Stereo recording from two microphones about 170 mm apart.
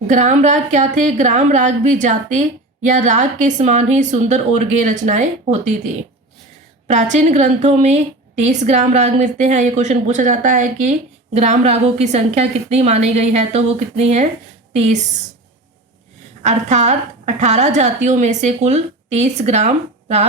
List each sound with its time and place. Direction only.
0.1 s a woman's voice: 45° right (ahead or behind)
6.8 s a woman's voice: 40° right (ahead or behind)
16.4 s a woman's voice: 45° right (ahead or behind)